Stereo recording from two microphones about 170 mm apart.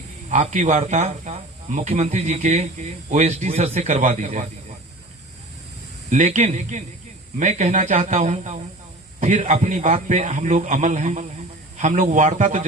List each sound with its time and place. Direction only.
0.3 s speech: 45° right (ahead or behind)
6.1 s speech: 45° right (ahead or behind)